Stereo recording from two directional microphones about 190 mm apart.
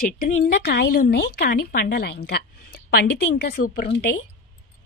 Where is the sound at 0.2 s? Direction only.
55° left (ahead or behind).